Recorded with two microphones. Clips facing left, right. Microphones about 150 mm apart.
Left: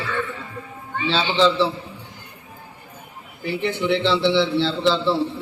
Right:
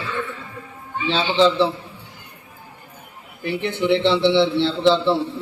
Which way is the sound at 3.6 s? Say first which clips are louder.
Right 2 dB; 20° right (ahead or behind).